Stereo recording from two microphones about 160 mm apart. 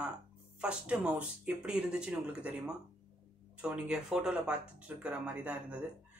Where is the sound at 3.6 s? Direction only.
5° right (ahead or behind).